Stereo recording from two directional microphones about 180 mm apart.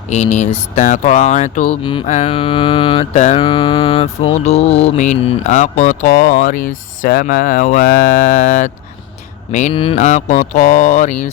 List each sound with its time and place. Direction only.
0.1 s mantra: 40° left (ahead or behind)
0.8 s speech: 45° left (ahead or behind)
1.8 s mantra: 30° left (ahead or behind)
3.4 s mantra: 25° left (ahead or behind)
6.3 s speech: 50° left (ahead or behind)
9.7 s mantra: 30° left (ahead or behind)
10.0 s speech: 40° left (ahead or behind)